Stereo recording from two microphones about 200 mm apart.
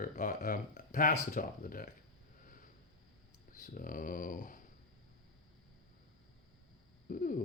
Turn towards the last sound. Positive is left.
turn(degrees=45)  # may be behind; listen again after turning